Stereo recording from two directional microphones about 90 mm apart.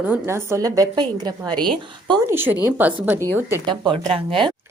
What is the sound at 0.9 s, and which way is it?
Speech, 55° right (ahead or behind).